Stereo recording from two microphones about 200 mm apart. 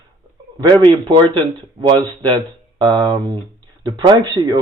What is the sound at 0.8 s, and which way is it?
A man's voice, 25° right (ahead or behind).